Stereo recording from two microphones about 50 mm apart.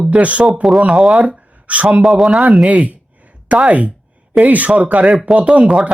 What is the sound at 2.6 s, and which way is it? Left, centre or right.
Speech, right.